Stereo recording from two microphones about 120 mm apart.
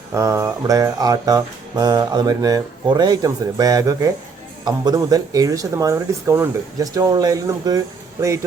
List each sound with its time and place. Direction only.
0.1 s music: 25° right (ahead or behind)
4.9 s speech: 30° right (ahead or behind)